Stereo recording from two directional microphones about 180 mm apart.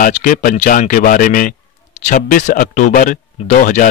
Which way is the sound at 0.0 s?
45° left (ahead or behind).